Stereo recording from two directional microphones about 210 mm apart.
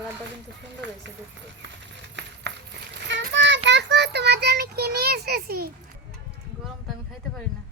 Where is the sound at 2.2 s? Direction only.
55° right (ahead or behind).